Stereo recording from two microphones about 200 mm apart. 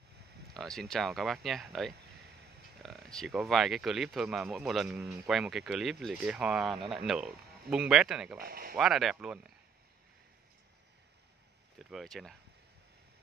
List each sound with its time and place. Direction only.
0.6 s speech: centre (ahead or behind)
8.4 s speech: 50° right (ahead or behind)
8.7 s speech: centre (ahead or behind)
11.8 s speech: centre (ahead or behind)